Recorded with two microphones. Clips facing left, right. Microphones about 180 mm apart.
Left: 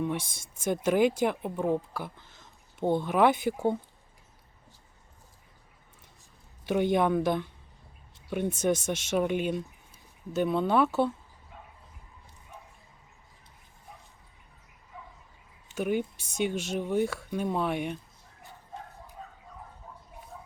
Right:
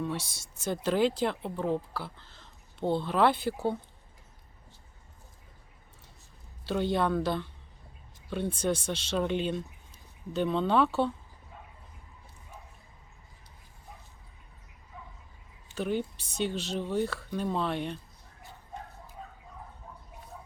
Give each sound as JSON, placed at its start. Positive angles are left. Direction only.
{"t": 0.2, "sound": "speech", "side_deg": 50}
{"t": 0.6, "sound": "speech", "side_deg": 15}
{"t": 6.7, "sound": "speech", "side_deg": 15}
{"t": 15.7, "sound": "speech", "side_deg": 15}